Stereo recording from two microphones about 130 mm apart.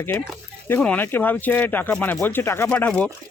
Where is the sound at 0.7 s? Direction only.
10° left (ahead or behind).